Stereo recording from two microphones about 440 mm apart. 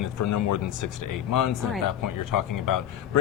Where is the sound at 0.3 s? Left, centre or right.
Left.